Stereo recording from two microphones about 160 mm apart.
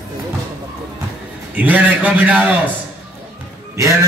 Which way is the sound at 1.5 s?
10° right (ahead or behind).